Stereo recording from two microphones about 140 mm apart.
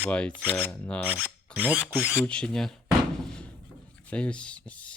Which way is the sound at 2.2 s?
5° left (ahead or behind).